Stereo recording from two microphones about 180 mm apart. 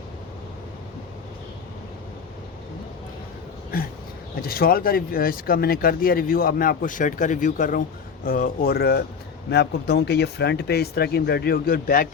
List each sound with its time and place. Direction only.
4.4 s speech: 55° left (ahead or behind)